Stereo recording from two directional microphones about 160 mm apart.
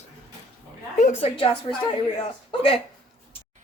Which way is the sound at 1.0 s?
40° left (ahead or behind).